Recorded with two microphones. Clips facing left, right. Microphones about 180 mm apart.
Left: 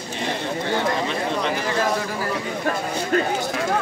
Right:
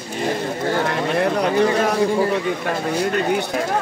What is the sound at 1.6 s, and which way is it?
Speech, 25° right (ahead or behind).